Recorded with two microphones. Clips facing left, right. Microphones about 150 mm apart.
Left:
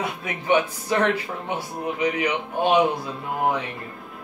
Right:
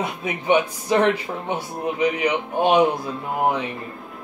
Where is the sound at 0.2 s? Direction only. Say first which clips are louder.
Right 2 dB; 20° right (ahead or behind).